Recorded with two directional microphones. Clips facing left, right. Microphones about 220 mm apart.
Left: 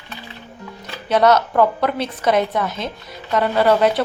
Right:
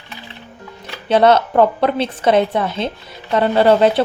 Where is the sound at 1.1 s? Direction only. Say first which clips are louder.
Right 3 dB; 30° right (ahead or behind).